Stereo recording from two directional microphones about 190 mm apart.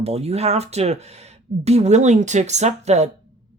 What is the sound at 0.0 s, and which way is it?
Speech, 30° right (ahead or behind).